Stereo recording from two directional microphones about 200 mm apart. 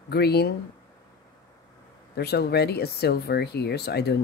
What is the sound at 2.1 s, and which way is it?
Speech, 55° left (ahead or behind).